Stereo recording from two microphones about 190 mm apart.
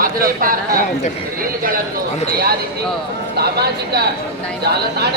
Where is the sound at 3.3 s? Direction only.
55° right (ahead or behind).